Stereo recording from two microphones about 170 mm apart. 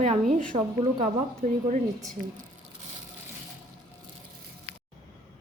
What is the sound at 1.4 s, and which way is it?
Speech, 50° right (ahead or behind).